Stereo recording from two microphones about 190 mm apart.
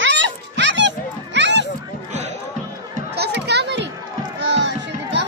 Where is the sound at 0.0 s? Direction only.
70° right (ahead or behind).